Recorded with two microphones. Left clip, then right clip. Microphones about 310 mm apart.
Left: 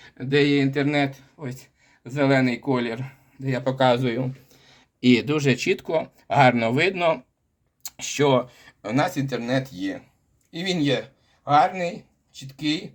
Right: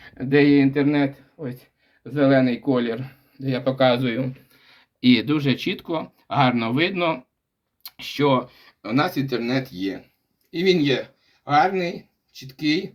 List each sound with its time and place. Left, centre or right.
0.0 s speech: centre; by 12.8 s left